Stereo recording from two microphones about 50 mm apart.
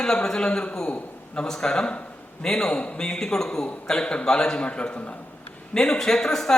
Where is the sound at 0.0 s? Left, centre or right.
Centre.